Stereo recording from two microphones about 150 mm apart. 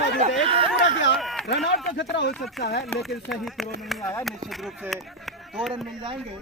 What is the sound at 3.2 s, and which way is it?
Speech, centre (ahead or behind).